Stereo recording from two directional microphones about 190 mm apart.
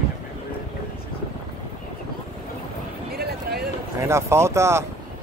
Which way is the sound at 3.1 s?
55° right (ahead or behind).